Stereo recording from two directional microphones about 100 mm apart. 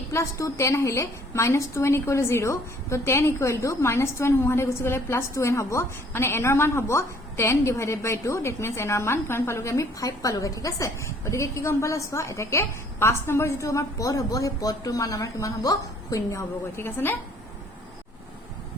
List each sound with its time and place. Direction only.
0.1 s a woman's voice: 30° left (ahead or behind)